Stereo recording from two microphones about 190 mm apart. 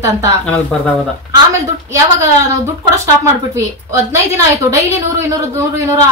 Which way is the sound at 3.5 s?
15° right (ahead or behind).